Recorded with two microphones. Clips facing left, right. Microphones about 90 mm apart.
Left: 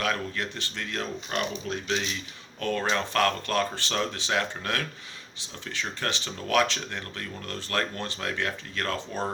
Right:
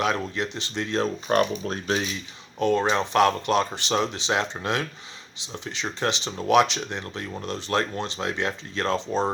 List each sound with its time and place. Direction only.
0.0 s speech: 20° right (ahead or behind)
1.3 s speech: 40° right (ahead or behind)
2.6 s speech: 20° right (ahead or behind)